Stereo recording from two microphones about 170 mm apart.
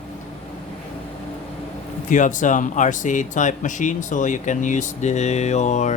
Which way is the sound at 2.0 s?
50° left (ahead or behind).